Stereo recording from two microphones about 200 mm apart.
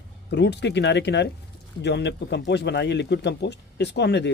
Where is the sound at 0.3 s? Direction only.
60° left (ahead or behind).